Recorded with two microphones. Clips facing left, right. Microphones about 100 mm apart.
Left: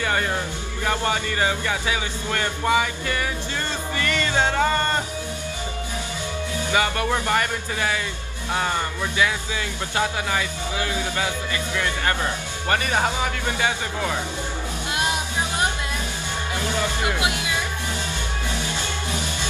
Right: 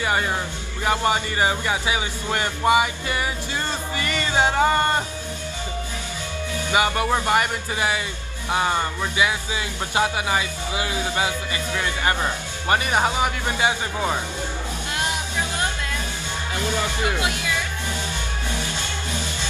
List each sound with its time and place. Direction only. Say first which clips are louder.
0.0 s speech: right 1 dB; 15° right (ahead or behind)
3.9 s music: left 1 dB; 15° right (ahead or behind)
6.7 s speech: right 2 dB; 15° right (ahead or behind)
17.0 s speech: even; 20° left (ahead or behind)